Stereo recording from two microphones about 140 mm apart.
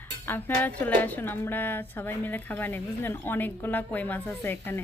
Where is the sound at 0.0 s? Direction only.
15° left (ahead or behind).